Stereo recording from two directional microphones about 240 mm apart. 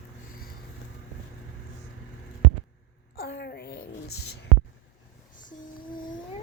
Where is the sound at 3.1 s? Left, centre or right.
Left.